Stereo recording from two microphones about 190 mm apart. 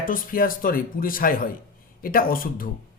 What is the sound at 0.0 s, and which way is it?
Speech, 45° left (ahead or behind).